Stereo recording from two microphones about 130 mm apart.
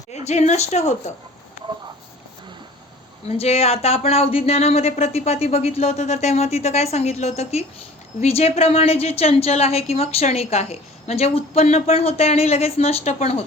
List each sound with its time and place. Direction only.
0.3 s speech: 60° left (ahead or behind)
3.2 s a woman's voice: 50° left (ahead or behind)